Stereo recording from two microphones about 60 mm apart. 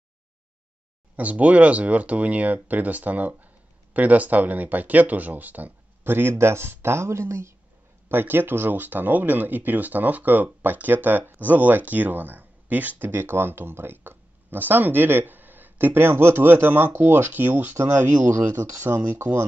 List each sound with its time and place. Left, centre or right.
1.1 s speech: right
8.1 s speech: right